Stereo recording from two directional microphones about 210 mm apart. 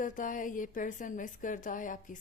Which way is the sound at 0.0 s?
40° left (ahead or behind).